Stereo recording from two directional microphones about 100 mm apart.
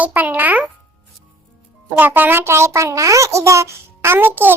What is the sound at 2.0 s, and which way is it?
A child's voice, 20° right (ahead or behind).